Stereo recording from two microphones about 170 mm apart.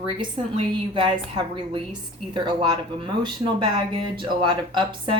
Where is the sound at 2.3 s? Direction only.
25° right (ahead or behind).